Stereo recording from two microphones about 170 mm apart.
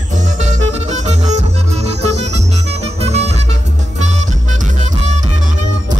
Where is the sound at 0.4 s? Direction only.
45° right (ahead or behind).